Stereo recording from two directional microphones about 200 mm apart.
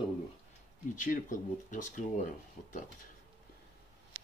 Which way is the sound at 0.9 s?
40° left (ahead or behind).